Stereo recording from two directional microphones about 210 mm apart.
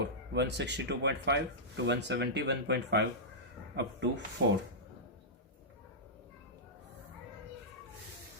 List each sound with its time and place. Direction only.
0.0 s speech: 55° right (ahead or behind)